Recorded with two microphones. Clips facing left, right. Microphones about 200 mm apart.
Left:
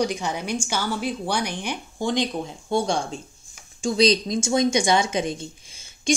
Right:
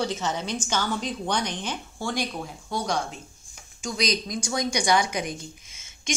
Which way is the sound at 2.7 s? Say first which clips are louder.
Left 5 dB; 30° left (ahead or behind).